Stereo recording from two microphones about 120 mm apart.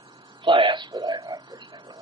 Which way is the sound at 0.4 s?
40° right (ahead or behind).